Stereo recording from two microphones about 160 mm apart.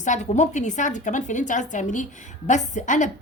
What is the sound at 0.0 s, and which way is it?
A woman's voice, 50° left (ahead or behind).